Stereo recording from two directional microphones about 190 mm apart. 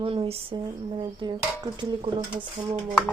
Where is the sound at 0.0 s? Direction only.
30° right (ahead or behind).